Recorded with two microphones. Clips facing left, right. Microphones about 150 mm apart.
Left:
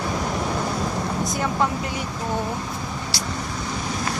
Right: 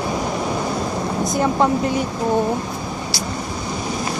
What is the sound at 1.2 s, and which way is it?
Speech, 25° right (ahead or behind).